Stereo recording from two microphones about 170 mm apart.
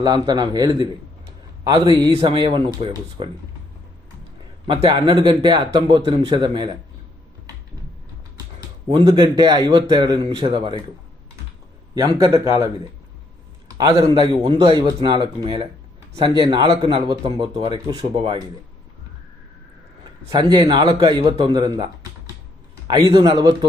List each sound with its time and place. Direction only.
0.0 s a man's voice: 25° right (ahead or behind)
4.6 s a man's voice: 30° right (ahead or behind)
8.9 s a man's voice: 30° right (ahead or behind)
11.9 s a man's voice: 20° right (ahead or behind)
13.7 s a man's voice: 20° right (ahead or behind)
20.4 s a man's voice: 30° right (ahead or behind)
22.9 s a man's voice: 25° right (ahead or behind)